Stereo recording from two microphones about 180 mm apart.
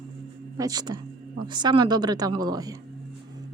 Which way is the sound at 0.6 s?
20° right (ahead or behind).